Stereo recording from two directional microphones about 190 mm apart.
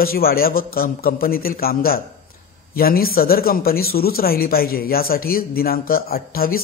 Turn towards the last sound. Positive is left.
turn(degrees=50)  # may be behind; listen again after turning